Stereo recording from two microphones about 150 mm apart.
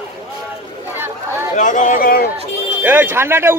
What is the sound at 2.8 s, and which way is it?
Speech, 15° right (ahead or behind).